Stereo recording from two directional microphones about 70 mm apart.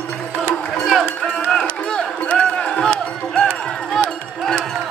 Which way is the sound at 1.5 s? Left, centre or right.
Centre.